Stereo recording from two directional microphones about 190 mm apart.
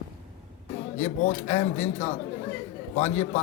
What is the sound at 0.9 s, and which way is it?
A man's voice, 35° left (ahead or behind).